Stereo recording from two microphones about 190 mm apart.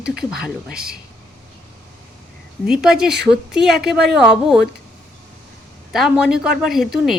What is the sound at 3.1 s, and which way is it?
Speech, 60° right (ahead or behind).